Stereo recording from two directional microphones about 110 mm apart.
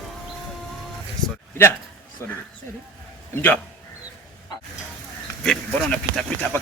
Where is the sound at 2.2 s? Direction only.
25° left (ahead or behind).